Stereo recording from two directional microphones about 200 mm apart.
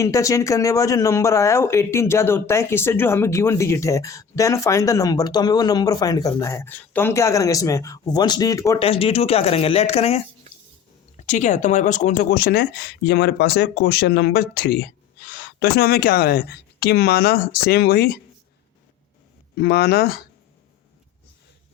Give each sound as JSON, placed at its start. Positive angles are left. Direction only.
{"t": 0.0, "sound": "speech", "side_deg": 15}
{"t": 8.8, "sound": "speech", "side_deg": 30}
{"t": 19.5, "sound": "speech", "side_deg": 50}